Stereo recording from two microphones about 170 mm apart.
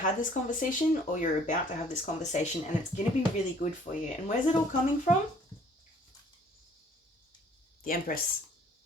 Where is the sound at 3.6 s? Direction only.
45° left (ahead or behind).